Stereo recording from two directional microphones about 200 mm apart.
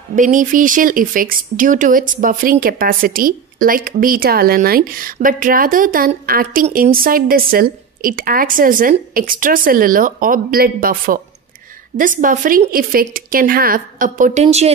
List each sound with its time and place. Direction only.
0.1 s speech: 40° right (ahead or behind)